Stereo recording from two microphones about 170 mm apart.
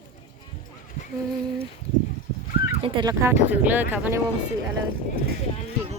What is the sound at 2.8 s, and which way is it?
Speech, 25° right (ahead or behind).